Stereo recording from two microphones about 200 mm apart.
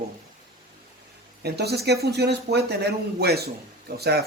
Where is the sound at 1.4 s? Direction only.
55° right (ahead or behind).